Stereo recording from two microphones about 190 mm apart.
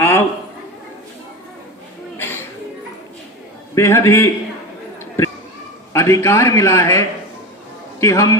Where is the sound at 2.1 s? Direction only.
10° left (ahead or behind).